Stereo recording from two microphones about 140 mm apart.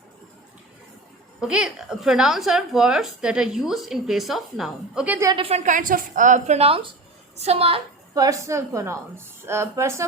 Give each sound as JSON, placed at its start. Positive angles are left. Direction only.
{"t": 1.4, "sound": "speech", "side_deg": -5}
{"t": 5.3, "sound": "a woman's voice", "side_deg": -45}
{"t": 5.6, "sound": "a woman's voice", "side_deg": -70}
{"t": 6.6, "sound": "a woman's voice", "side_deg": -40}
{"t": 8.1, "sound": "a woman's voice", "side_deg": -25}